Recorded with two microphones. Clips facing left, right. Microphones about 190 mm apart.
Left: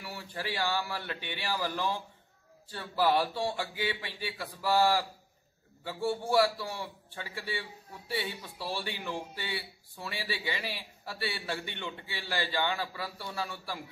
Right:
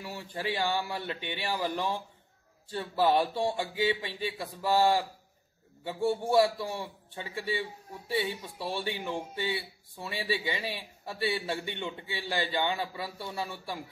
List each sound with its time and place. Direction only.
0.0 s speech: 20° right (ahead or behind)